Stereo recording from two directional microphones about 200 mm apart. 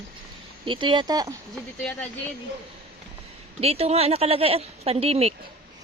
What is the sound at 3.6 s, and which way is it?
Speech, 30° right (ahead or behind).